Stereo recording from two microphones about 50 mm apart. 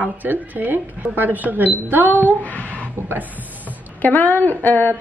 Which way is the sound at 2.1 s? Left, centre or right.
Left.